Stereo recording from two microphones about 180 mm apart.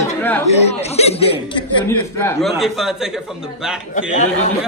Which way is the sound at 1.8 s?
15° left (ahead or behind).